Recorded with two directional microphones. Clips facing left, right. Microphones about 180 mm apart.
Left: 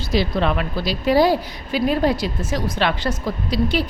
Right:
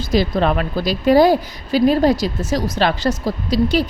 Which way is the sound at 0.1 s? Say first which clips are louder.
Right 3 dB; 45° right (ahead or behind).